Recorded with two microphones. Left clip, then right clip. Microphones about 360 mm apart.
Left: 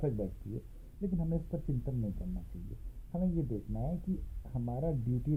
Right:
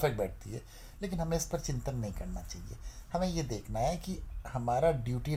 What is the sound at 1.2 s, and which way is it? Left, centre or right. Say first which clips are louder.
Speech: right 6 dB; right.